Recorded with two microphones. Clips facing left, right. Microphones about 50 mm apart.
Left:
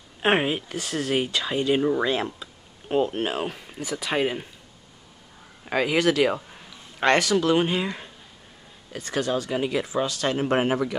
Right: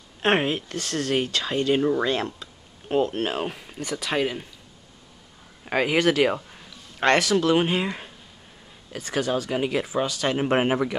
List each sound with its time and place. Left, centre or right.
0.2 s speech: centre
5.7 s speech: centre
10.3 s speech: centre